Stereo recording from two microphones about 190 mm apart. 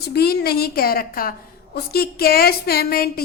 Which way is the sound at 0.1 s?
55° left (ahead or behind).